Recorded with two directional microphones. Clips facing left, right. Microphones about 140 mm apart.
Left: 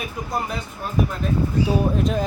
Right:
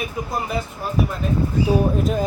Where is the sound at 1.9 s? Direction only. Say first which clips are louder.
Right 1 dB; 5° right (ahead or behind).